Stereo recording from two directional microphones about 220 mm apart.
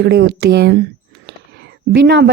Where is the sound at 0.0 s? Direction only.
50° right (ahead or behind).